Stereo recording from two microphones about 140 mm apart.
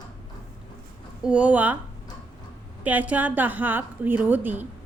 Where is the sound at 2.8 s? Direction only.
10° right (ahead or behind).